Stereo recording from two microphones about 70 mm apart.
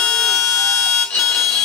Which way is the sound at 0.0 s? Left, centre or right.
Centre.